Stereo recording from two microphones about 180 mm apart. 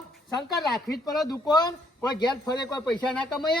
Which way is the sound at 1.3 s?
20° left (ahead or behind).